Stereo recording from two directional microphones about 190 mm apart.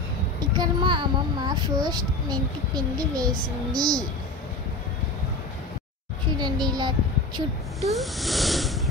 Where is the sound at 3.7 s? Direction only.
20° right (ahead or behind).